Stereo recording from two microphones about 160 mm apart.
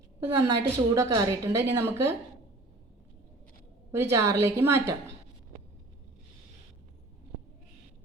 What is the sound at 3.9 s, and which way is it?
A woman's voice, 15° right (ahead or behind).